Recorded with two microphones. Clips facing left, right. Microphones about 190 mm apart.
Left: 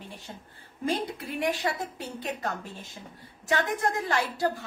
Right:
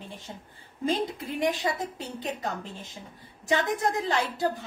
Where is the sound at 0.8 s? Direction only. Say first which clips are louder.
Right 2 dB; 20° right (ahead or behind).